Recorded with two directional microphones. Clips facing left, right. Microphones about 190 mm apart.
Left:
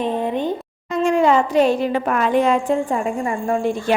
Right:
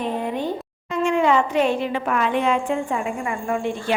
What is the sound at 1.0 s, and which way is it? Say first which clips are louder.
A woman's voice: left 3 dB; 40° left (ahead or behind).